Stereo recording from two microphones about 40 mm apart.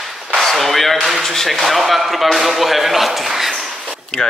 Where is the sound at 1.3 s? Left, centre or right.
Centre.